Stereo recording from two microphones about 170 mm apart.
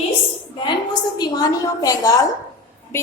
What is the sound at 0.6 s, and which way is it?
A woman's voice, 25° left (ahead or behind).